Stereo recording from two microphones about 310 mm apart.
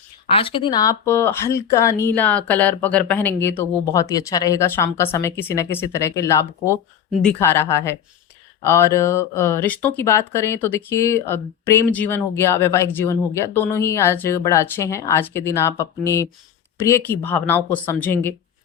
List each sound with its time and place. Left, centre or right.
0.3 s speech: centre